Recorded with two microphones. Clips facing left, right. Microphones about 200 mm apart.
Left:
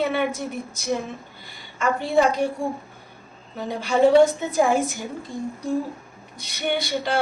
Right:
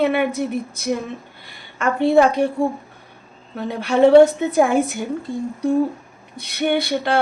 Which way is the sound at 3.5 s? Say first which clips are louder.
Right 4 dB; 60° right (ahead or behind).